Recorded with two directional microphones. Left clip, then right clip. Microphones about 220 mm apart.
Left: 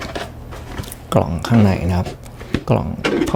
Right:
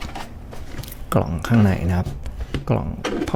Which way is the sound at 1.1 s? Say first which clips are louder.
Left 4 dB; 35° right (ahead or behind).